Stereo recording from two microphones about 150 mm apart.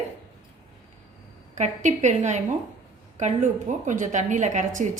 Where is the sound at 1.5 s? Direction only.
55° right (ahead or behind).